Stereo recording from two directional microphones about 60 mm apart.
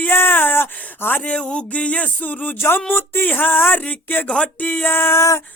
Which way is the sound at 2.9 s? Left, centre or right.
Left.